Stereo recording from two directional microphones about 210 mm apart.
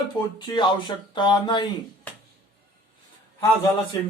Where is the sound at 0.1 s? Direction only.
20° left (ahead or behind).